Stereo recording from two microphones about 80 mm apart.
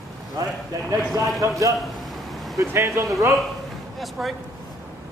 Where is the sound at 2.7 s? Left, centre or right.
Right.